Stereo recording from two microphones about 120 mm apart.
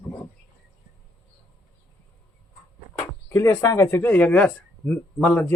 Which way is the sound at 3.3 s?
25° left (ahead or behind).